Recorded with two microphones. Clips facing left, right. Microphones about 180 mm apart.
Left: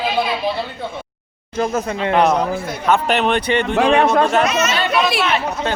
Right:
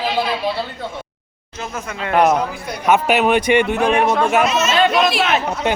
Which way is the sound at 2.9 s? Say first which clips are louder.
Right 2 dB; 10° right (ahead or behind).